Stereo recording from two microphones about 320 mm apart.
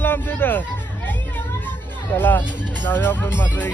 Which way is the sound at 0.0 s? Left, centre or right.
Centre.